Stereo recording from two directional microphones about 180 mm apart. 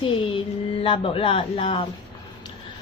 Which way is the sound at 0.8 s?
30° left (ahead or behind).